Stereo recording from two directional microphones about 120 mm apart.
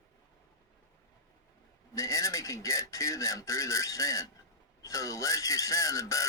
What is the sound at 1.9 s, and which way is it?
Speech, 25° left (ahead or behind).